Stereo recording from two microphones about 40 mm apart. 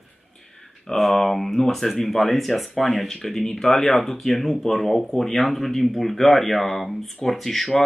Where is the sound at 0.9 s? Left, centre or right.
Centre.